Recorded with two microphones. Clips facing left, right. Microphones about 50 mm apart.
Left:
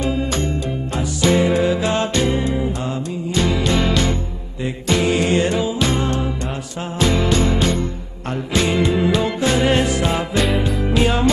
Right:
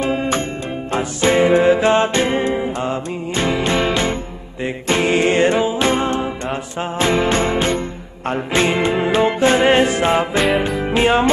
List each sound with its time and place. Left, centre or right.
0.0 s music: right